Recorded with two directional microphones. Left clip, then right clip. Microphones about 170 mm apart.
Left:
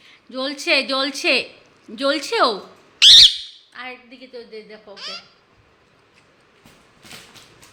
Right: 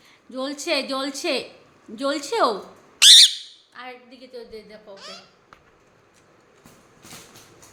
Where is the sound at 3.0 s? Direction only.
55° right (ahead or behind).